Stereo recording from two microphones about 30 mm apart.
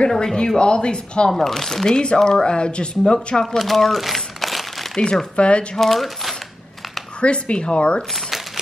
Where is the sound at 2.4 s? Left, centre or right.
Left.